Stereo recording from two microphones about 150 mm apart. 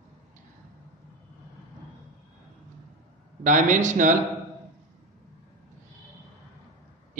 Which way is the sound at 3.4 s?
60° right (ahead or behind).